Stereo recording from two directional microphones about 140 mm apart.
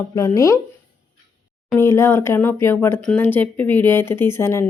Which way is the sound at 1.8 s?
20° left (ahead or behind).